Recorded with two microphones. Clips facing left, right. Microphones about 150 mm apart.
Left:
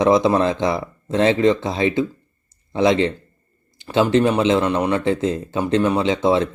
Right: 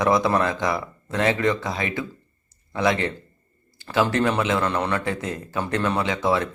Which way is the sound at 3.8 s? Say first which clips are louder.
Left 5 dB; 25° left (ahead or behind).